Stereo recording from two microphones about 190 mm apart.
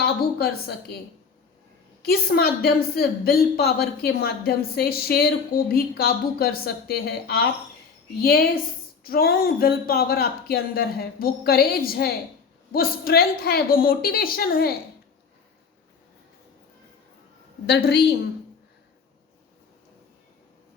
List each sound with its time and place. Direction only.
0.0 s a woman's voice: 55° left (ahead or behind)
2.0 s a woman's voice: 55° left (ahead or behind)
17.7 s a woman's voice: 60° left (ahead or behind)